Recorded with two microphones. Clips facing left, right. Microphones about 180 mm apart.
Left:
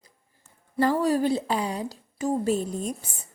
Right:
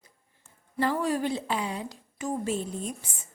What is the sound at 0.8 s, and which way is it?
Speech, 40° left (ahead or behind).